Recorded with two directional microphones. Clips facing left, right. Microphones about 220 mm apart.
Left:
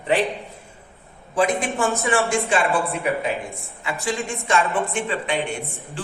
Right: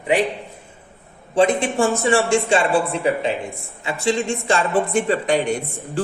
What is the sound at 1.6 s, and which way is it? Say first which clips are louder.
A woman's voice: right 4 dB; 30° right (ahead or behind).